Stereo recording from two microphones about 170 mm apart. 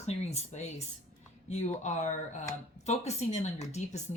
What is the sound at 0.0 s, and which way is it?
Speech, 40° left (ahead or behind).